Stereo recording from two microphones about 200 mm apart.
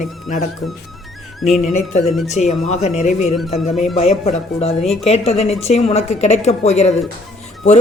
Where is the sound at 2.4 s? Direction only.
35° left (ahead or behind).